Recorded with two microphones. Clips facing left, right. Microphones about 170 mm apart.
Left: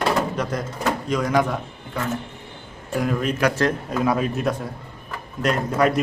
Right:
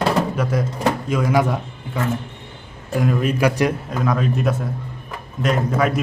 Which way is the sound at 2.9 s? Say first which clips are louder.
Right 3 dB; centre (ahead or behind).